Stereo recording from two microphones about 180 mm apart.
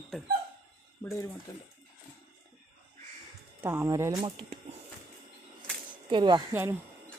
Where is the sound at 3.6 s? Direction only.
15° right (ahead or behind).